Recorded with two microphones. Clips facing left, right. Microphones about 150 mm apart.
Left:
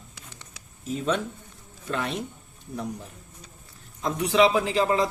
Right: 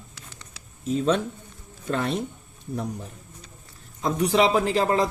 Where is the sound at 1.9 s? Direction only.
40° right (ahead or behind).